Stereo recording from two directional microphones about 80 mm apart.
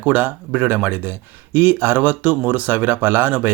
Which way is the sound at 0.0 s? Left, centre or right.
Centre.